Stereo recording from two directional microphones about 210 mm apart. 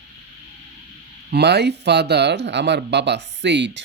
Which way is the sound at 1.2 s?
50° right (ahead or behind).